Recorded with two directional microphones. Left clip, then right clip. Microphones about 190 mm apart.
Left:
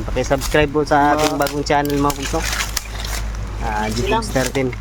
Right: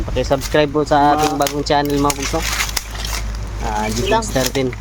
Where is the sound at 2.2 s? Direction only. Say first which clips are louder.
Right 2 dB; 15° right (ahead or behind).